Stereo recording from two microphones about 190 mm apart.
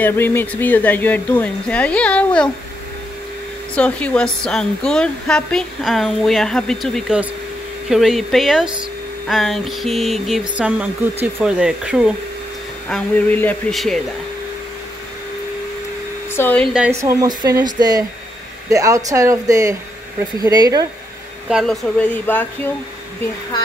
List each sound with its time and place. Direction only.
0.0 s speech: 10° left (ahead or behind)
3.7 s a woman's voice: 5° left (ahead or behind)
12.9 s a woman's voice: 10° left (ahead or behind)
16.3 s a woman's voice: 10° left (ahead or behind)
16.9 s speech: 15° right (ahead or behind)
21.5 s speech: centre (ahead or behind)